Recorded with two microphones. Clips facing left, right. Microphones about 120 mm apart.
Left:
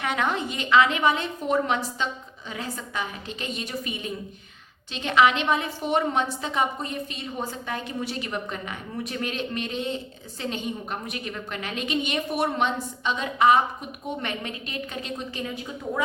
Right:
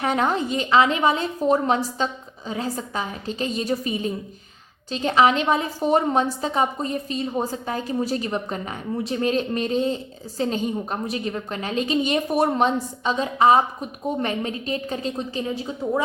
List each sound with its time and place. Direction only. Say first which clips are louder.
0.0 s a woman's voice: right 4 dB; 35° right (ahead or behind)